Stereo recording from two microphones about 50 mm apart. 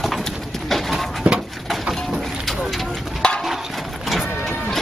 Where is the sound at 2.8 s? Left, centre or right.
Centre.